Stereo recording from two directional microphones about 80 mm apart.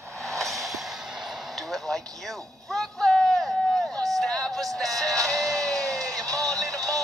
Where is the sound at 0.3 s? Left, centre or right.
Centre.